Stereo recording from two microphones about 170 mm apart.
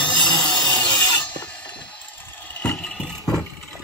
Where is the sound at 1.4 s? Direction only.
5° left (ahead or behind).